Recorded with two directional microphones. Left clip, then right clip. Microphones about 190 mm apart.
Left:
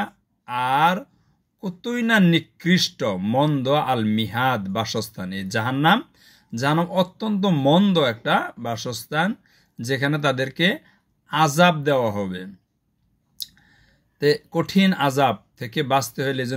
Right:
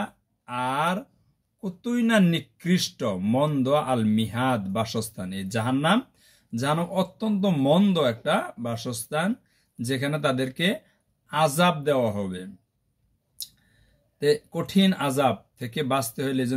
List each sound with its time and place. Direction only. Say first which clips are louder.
0.0 s cattle: left 5 dB; 20° left (ahead or behind)
1.6 s speech: left 2 dB; 15° left (ahead or behind)
14.2 s speech: left 3 dB; 20° left (ahead or behind)